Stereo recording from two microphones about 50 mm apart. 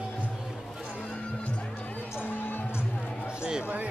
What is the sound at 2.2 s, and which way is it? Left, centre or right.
Music, left.